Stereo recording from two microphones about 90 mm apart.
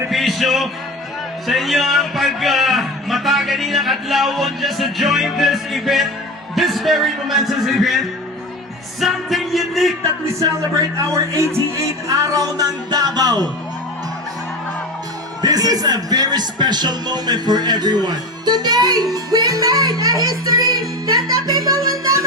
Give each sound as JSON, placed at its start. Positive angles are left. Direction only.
{"t": 0.1, "sound": "music", "side_deg": 0}
{"t": 1.5, "sound": "a man's voice", "side_deg": 0}
{"t": 9.0, "sound": "music", "side_deg": 0}
{"t": 10.9, "sound": "a man's voice", "side_deg": -35}
{"t": 15.4, "sound": "a man's voice", "side_deg": -45}